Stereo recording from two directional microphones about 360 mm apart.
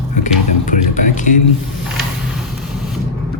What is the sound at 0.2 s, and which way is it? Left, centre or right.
Speech, left.